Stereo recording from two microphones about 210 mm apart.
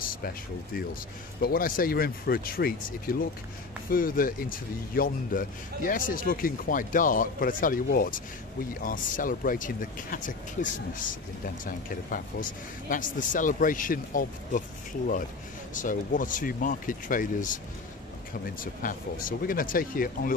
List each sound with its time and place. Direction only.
0.1 s speech: 45° left (ahead or behind)
15.7 s speech: 40° left (ahead or behind)